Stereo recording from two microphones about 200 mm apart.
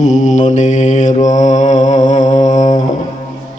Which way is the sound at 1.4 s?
35° left (ahead or behind).